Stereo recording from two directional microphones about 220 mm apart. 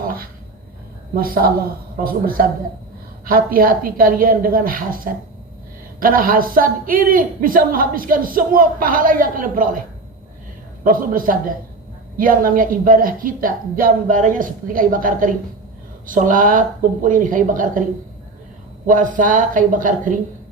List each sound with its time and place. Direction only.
1.1 s a man's voice: 40° right (ahead or behind)
10.8 s a man's voice: 40° right (ahead or behind)
18.9 s a man's voice: 35° right (ahead or behind)